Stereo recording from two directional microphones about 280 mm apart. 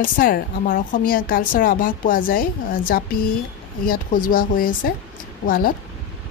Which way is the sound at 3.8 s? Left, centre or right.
Left.